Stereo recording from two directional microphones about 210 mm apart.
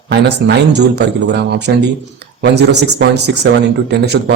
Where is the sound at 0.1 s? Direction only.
55° right (ahead or behind).